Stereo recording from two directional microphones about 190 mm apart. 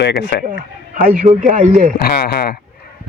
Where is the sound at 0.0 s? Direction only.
60° left (ahead or behind).